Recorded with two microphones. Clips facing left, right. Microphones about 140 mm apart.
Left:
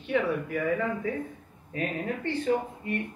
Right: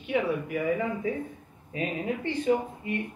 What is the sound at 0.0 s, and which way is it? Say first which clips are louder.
Speech: even; 15° right (ahead or behind).